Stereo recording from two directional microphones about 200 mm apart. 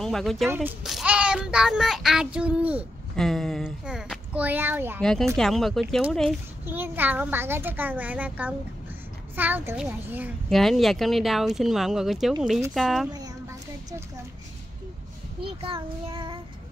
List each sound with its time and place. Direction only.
0.0 s a child's voice: centre (ahead or behind)
5.0 s a child's voice: 5° left (ahead or behind)
6.6 s a child's voice: 10° right (ahead or behind)
15.4 s child singing: 25° right (ahead or behind)